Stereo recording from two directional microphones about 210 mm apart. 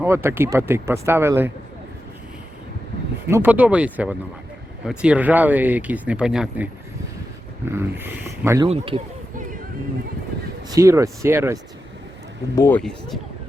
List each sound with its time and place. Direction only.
0.0 s speech: 10° right (ahead or behind)
3.2 s speech: 10° right (ahead or behind)
7.7 s speech: 10° right (ahead or behind)
8.6 s speech: 25° right (ahead or behind)
10.8 s speech: 15° right (ahead or behind)
12.5 s speech: 10° left (ahead or behind)